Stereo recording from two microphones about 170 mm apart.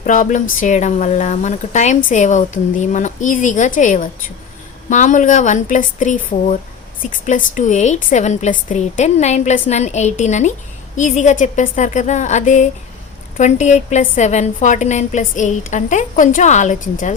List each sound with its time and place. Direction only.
0.0 s speech: 50° left (ahead or behind)